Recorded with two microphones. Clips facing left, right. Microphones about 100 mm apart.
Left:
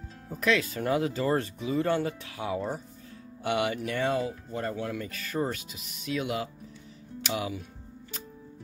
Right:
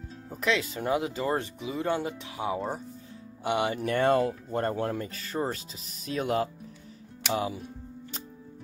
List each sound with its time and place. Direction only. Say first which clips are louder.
0.3 s speech: left 2 dB; 20° right (ahead or behind)
3.8 s speech: right 4 dB; 50° right (ahead or behind); by 7.6 s 30° right (ahead or behind)